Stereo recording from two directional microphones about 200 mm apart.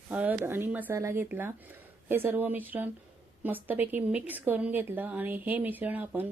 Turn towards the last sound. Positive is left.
turn(degrees=-10)  # may be behind; listen again after turning